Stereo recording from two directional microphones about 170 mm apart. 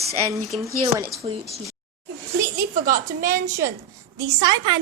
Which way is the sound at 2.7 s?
50° right (ahead or behind).